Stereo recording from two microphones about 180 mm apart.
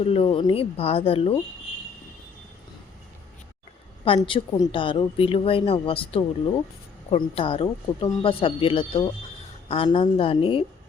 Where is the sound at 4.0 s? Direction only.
30° left (ahead or behind).